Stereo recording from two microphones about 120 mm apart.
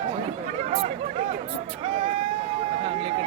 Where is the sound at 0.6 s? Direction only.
60° right (ahead or behind).